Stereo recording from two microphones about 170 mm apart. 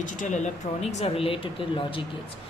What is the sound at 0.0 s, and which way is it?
Speech, 50° left (ahead or behind).